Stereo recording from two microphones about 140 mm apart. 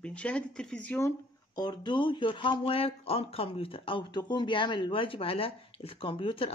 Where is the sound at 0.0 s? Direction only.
10° left (ahead or behind).